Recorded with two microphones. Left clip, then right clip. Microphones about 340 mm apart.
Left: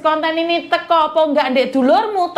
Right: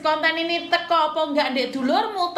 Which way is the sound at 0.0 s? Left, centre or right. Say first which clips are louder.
Left 5 dB; left.